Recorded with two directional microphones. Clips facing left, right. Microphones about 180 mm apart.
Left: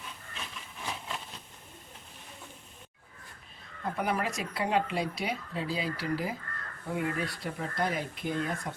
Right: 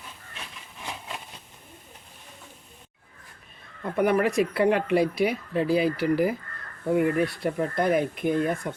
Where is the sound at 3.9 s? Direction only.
60° right (ahead or behind).